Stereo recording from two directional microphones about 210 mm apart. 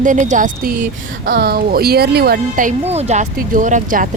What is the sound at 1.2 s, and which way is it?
Speech, 50° right (ahead or behind).